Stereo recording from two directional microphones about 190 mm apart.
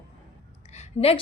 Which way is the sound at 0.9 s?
30° left (ahead or behind).